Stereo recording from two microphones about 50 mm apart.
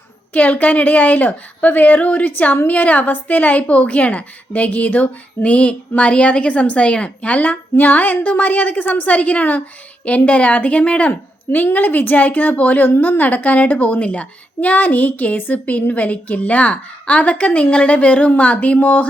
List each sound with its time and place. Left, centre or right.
0.3 s a child's voice: left
11.5 s a child's voice: left